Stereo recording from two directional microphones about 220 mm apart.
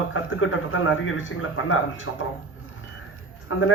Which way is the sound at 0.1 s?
65° left (ahead or behind).